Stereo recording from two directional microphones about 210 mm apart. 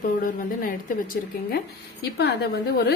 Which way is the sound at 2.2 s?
50° left (ahead or behind).